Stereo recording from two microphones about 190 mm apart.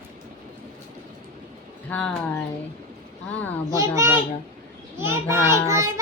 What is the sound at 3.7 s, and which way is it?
A child's voice, 15° right (ahead or behind).